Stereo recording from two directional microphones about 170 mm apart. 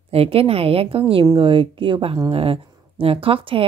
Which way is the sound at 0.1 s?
35° right (ahead or behind).